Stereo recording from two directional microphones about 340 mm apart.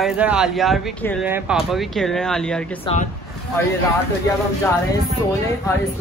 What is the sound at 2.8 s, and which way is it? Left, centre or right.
Speech, centre.